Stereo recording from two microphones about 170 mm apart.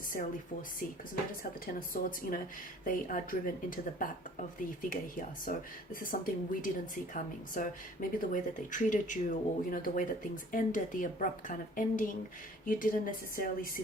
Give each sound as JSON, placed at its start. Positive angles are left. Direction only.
{"t": 1.6, "sound": "speech", "side_deg": 55}